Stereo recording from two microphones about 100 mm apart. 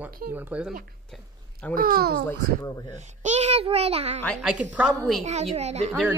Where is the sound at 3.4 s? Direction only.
85° right.